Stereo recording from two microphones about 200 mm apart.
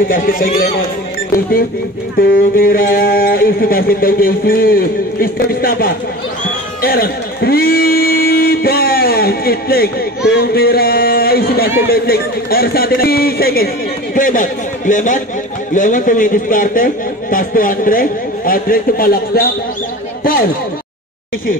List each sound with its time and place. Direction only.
0.1 s a man's voice: 45° left (ahead or behind)
2.1 s a man's voice: 45° left (ahead or behind)